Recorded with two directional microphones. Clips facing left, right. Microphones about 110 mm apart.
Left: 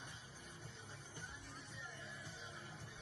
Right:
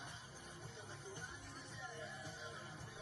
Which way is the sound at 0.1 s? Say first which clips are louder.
Right 2 dB; 30° right (ahead or behind).